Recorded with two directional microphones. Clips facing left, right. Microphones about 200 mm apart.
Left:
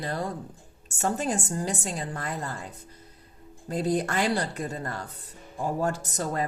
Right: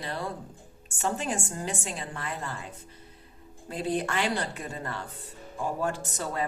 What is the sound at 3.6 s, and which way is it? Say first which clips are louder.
A woman's voice: left 3 dB; 40° left (ahead or behind).